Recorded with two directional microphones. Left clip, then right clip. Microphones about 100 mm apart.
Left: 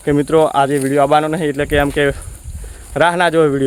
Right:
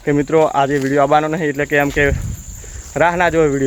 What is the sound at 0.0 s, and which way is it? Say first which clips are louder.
Speech: left 1 dB; 30° left (ahead or behind).